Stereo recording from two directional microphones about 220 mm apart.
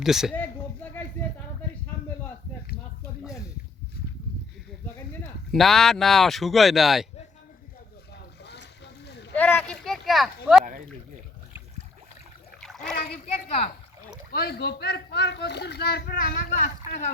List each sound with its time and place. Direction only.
0.0 s speech: centre (ahead or behind)
5.5 s speech: centre (ahead or behind)
9.3 s a sound: 5° left (ahead or behind)
12.5 s splash: centre (ahead or behind)
14.3 s speech: 45° left (ahead or behind)